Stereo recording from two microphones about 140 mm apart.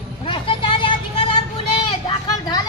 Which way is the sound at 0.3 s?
35° left (ahead or behind).